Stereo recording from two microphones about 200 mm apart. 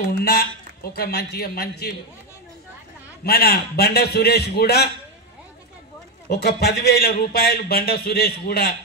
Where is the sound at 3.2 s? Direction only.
50° left (ahead or behind).